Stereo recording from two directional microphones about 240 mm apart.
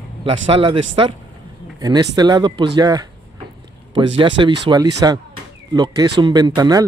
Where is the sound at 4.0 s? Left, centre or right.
Centre.